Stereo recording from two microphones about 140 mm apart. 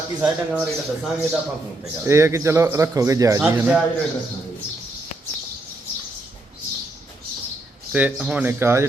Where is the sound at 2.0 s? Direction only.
20° right (ahead or behind).